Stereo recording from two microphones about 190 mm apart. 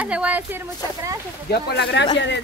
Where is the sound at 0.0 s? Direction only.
5° right (ahead or behind).